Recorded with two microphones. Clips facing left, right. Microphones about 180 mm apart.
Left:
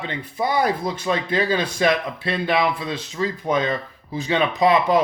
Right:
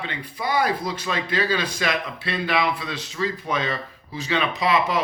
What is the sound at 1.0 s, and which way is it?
Speech, 20° left (ahead or behind).